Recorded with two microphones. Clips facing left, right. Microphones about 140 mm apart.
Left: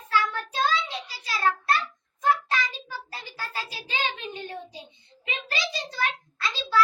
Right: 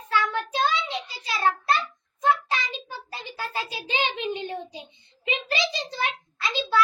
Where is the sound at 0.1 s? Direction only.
20° right (ahead or behind).